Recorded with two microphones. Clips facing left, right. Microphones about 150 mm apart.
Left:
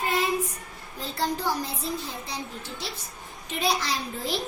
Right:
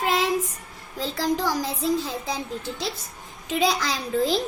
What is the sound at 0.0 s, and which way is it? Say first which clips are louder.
Child singing: right 3 dB; 90° right.